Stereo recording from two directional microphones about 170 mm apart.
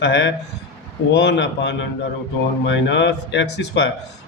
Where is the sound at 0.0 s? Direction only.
90° left.